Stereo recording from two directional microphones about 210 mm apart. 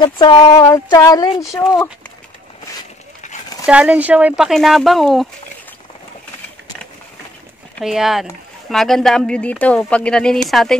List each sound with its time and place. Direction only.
0.0 s speech: 20° left (ahead or behind)
3.6 s speech: 5° right (ahead or behind)
7.8 s speech: centre (ahead or behind)